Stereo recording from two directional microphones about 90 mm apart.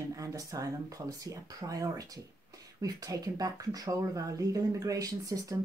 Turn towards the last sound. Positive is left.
turn(degrees=-40)  # may be behind; listen again after turning